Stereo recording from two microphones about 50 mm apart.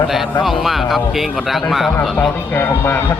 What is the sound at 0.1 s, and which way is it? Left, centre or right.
Speech, centre.